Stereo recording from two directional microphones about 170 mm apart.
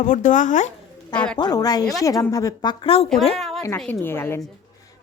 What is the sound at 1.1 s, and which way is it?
Speech, 5° left (ahead or behind).